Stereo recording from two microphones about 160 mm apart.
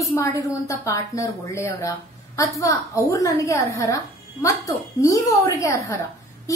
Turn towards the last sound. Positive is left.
turn(degrees=20)  # may be behind; listen again after turning